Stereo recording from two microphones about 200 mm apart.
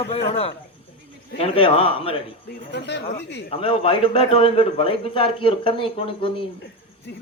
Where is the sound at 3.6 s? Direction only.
25° left (ahead or behind).